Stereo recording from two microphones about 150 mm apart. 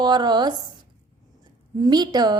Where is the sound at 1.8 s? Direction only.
30° right (ahead or behind).